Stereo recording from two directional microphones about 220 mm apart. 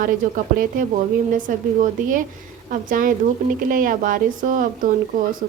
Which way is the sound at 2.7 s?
35° right (ahead or behind).